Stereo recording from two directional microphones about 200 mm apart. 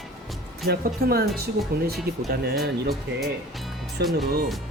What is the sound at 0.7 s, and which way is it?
Speech, 50° right (ahead or behind).